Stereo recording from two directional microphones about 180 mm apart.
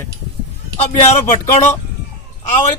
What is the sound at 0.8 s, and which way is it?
Speech, 40° left (ahead or behind).